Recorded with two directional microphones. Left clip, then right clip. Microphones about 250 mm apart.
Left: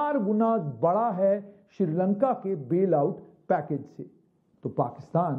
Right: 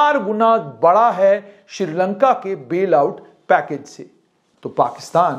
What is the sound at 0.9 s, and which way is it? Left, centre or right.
A man's voice, centre.